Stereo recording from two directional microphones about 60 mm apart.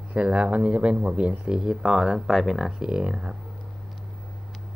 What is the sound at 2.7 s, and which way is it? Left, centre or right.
Speech, centre.